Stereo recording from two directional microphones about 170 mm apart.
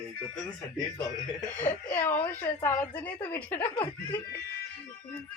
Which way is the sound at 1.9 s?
10° left (ahead or behind).